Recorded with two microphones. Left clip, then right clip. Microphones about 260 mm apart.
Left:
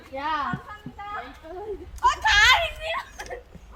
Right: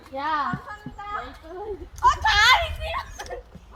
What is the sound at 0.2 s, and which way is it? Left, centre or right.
Speech, centre.